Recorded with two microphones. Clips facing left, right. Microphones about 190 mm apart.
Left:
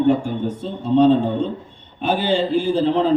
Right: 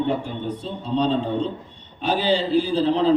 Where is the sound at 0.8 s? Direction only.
50° left (ahead or behind).